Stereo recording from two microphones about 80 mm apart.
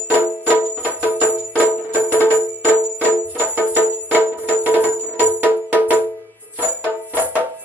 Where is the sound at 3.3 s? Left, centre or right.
Right.